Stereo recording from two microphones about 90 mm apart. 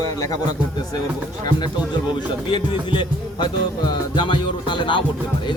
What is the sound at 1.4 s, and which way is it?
Speech, 55° left (ahead or behind).